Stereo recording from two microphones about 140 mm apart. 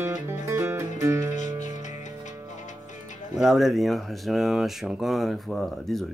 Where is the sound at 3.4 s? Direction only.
5° right (ahead or behind).